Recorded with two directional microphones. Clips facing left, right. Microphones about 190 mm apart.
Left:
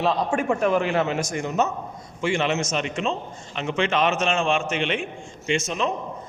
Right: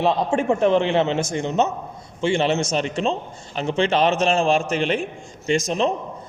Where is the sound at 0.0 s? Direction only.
25° right (ahead or behind).